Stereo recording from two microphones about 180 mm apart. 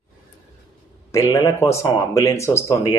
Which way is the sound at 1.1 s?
20° left (ahead or behind).